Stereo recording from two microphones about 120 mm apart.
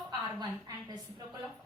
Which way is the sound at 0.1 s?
35° right (ahead or behind).